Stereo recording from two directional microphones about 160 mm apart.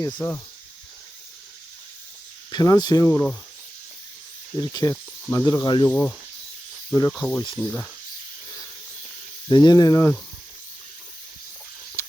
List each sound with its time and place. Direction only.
0.0 s speech: 20° left (ahead or behind)
2.5 s speech: 25° left (ahead or behind)
4.5 s speech: 25° left (ahead or behind)
5.9 s speech: 10° left (ahead or behind)
7.2 s speech: 15° left (ahead or behind)
7.5 s a sound: centre (ahead or behind)
9.5 s speech: 25° left (ahead or behind)